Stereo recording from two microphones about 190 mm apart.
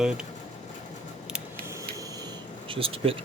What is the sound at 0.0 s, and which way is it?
Speech, 5° right (ahead or behind).